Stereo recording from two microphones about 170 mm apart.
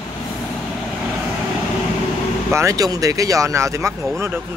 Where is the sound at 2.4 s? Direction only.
15° right (ahead or behind).